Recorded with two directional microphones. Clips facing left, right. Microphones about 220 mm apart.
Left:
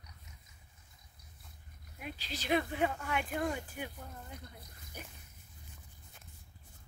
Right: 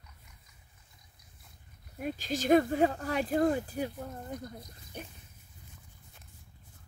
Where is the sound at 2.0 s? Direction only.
45° right (ahead or behind).